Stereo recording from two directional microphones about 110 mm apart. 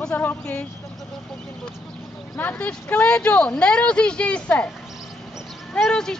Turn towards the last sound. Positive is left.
turn(degrees=5)  # may be behind; listen again after turning